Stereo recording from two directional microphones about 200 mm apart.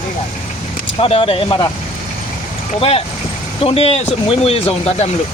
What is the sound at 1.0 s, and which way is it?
Speech, 30° left (ahead or behind).